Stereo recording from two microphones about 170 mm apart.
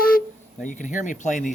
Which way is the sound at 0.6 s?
45° left (ahead or behind).